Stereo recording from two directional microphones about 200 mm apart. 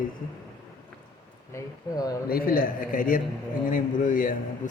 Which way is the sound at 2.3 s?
45° left (ahead or behind).